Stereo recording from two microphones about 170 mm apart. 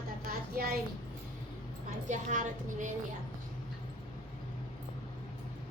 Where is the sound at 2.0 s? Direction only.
45° right (ahead or behind).